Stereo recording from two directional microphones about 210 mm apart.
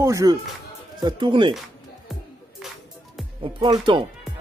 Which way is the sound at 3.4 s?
20° right (ahead or behind).